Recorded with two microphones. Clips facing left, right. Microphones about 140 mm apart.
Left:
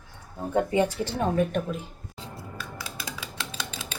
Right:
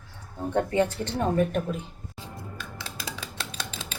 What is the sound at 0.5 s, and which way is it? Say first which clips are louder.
Speech: left 1 dB; 15° left (ahead or behind).